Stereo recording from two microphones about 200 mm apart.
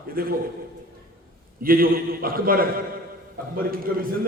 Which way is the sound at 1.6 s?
45° right (ahead or behind).